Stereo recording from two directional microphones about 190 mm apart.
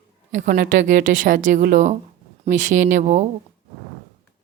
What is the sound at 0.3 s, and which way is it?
A woman's voice, 40° right (ahead or behind).